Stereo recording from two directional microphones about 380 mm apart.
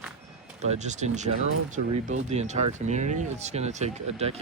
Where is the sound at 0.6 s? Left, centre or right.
Centre.